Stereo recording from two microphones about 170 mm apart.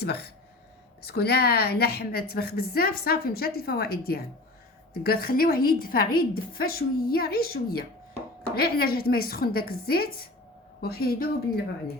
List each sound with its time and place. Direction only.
0.0 s a woman's voice: 70° left (ahead or behind)